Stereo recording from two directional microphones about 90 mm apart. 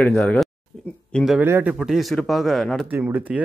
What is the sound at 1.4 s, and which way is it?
Speech, 20° right (ahead or behind).